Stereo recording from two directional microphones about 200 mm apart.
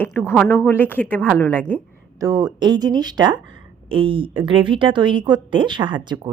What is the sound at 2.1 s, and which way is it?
A woman's voice, 15° right (ahead or behind).